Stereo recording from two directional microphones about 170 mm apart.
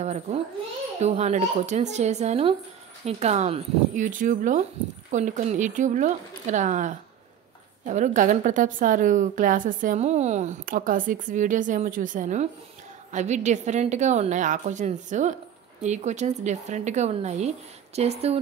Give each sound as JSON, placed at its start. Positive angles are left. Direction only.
{"t": 0.0, "sound": "a woman's voice", "side_deg": -40}